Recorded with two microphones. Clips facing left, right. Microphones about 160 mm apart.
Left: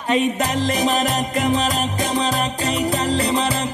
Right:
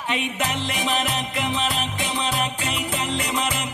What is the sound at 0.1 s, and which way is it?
Music, 40° left (ahead or behind).